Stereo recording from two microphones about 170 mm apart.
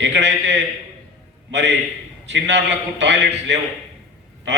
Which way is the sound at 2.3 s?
90° right.